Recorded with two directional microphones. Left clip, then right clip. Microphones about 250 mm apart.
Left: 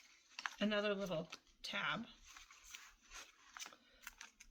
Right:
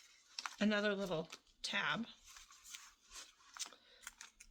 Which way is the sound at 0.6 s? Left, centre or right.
Right.